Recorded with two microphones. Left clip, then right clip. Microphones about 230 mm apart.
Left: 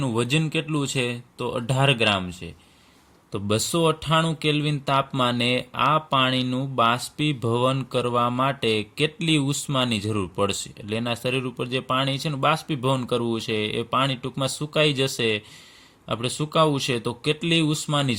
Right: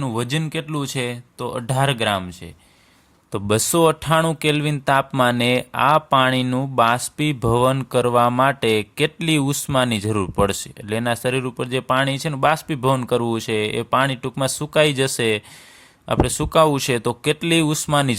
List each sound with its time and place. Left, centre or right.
0.0 s speech: right